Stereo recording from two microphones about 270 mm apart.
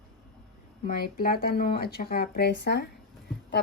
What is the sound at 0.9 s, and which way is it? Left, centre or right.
Speech, left.